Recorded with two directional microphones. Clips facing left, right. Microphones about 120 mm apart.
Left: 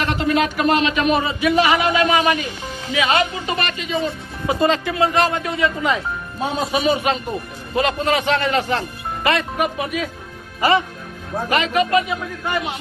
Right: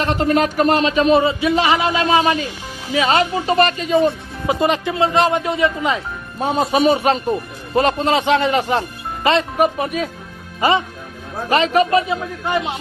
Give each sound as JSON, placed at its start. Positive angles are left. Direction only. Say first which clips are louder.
{"t": 0.0, "sound": "a man's voice", "louder": "right 2 dB", "side_deg": -40}
{"t": 4.4, "sound": "speech", "louder": "right 1 dB", "side_deg": -20}
{"t": 6.7, "sound": "a man's voice", "louder": "right 4 dB", "side_deg": -35}
{"t": 9.6, "sound": "a man's voice", "louder": "right 4 dB", "side_deg": -35}
{"t": 10.6, "sound": "speech", "louder": "even", "side_deg": -20}
{"t": 11.4, "sound": "a man's voice", "louder": "right 4 dB", "side_deg": -30}